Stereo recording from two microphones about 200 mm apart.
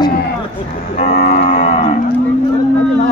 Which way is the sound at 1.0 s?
35° left (ahead or behind).